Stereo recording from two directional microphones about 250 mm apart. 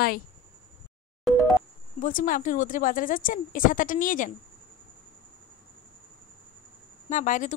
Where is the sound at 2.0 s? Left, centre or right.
Left.